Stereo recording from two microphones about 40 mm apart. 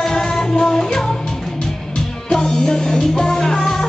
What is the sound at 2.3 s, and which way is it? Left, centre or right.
Music, centre.